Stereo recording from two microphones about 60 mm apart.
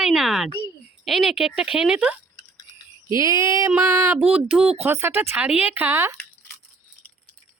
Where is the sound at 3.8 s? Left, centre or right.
Right.